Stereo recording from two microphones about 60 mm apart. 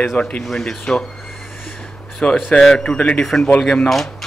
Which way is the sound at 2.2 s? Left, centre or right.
Left.